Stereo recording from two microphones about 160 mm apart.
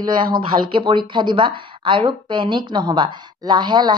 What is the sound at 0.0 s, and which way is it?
Speech, 30° right (ahead or behind).